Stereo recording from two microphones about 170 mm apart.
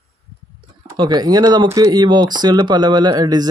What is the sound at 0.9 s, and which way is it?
Speech, 25° right (ahead or behind).